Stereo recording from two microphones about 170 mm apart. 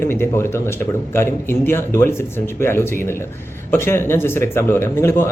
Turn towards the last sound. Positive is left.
turn(degrees=15)  # may be behind; listen again after turning